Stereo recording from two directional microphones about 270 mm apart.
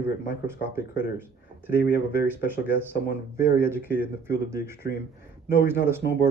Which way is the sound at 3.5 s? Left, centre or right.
Centre.